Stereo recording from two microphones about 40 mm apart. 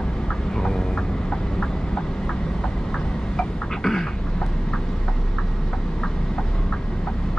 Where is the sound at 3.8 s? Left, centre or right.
Centre.